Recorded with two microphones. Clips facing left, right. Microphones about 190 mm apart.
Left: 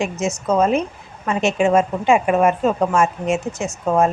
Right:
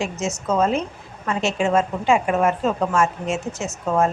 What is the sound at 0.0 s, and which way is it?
A woman's voice, 15° left (ahead or behind).